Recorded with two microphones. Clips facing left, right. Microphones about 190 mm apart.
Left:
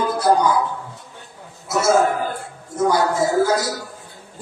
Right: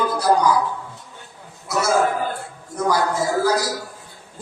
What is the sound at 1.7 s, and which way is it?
A man's voice, 25° left (ahead or behind).